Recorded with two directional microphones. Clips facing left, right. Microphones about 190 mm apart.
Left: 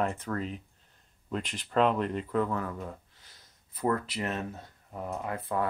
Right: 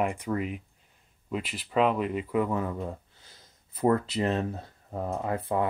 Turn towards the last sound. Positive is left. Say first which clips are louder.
# right 4 dB
turn(degrees=-25)  # may be behind; listen again after turning